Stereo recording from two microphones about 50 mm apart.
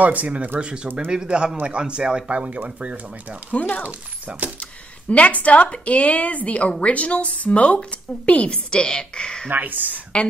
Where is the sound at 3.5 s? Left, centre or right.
Left.